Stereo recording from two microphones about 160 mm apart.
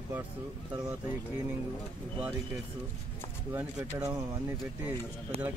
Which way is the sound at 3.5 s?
10° right (ahead or behind).